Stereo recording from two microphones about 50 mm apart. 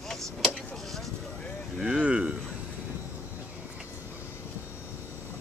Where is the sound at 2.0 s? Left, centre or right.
Right.